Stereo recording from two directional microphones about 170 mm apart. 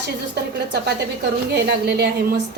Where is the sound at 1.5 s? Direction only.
75° right (ahead or behind).